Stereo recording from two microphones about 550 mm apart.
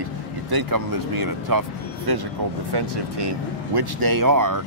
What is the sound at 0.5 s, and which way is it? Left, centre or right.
Speech, right.